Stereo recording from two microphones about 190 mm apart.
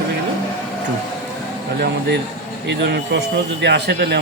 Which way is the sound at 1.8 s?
60° right (ahead or behind).